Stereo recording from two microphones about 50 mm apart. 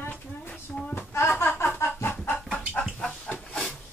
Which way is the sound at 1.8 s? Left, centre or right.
Left.